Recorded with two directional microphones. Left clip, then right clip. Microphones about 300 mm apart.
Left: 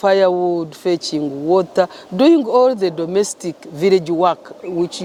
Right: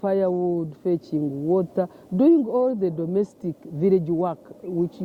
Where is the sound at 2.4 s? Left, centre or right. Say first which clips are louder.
Left 9 dB; left.